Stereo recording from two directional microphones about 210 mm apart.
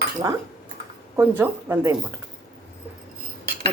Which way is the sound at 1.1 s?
10° right (ahead or behind).